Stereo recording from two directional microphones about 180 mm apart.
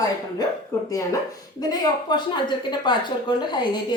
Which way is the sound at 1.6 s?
25° left (ahead or behind).